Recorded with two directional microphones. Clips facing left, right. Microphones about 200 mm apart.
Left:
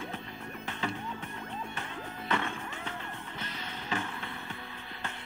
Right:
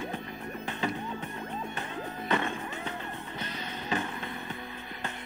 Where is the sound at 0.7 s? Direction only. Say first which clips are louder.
Right 3 dB; 15° right (ahead or behind).